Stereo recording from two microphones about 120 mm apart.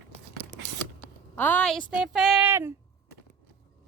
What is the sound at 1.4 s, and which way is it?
Speech, 15° left (ahead or behind).